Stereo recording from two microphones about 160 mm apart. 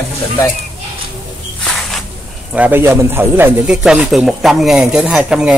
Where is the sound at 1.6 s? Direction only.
Centre (ahead or behind).